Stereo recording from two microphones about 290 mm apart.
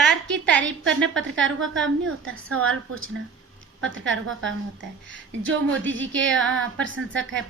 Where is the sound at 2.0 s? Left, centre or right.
Right.